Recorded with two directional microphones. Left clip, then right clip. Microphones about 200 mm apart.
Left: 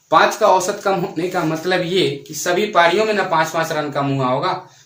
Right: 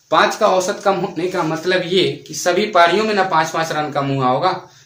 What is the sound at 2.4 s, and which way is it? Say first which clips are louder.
Speech: right 1 dB; 15° right (ahead or behind).